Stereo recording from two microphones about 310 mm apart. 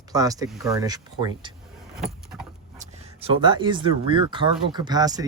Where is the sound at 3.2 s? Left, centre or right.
Centre.